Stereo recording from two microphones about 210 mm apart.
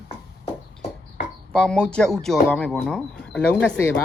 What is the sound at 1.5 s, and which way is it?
Speech, 5° left (ahead or behind).